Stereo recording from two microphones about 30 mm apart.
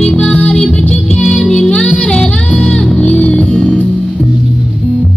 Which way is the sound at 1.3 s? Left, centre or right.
Centre.